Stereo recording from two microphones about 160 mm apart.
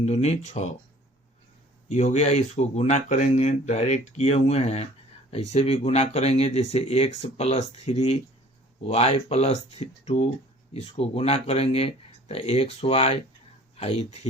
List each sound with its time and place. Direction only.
0.0 s speech: 45° left (ahead or behind)
1.9 s speech: 45° left (ahead or behind)